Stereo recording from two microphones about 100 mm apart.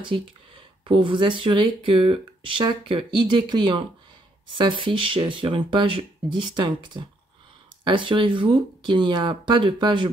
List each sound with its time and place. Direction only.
0.0 s speech: 55° right (ahead or behind)